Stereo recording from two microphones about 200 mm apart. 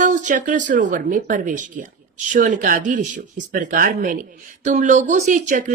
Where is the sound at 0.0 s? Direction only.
40° right (ahead or behind).